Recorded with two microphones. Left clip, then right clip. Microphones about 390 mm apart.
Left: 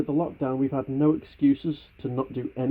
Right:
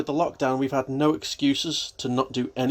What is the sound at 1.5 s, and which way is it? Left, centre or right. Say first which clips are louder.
Speech: right 2 dB; right.